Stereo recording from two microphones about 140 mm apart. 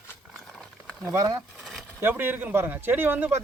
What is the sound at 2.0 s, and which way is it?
Speech, 15° right (ahead or behind).